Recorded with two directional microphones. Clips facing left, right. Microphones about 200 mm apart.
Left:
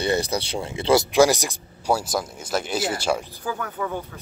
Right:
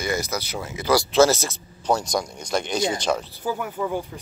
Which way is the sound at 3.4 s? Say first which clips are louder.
Right 3 dB; 10° right (ahead or behind).